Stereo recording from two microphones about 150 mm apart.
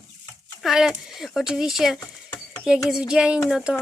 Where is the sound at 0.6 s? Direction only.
5° right (ahead or behind).